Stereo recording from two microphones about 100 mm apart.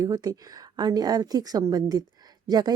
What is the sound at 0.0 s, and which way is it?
Speech, 35° right (ahead or behind).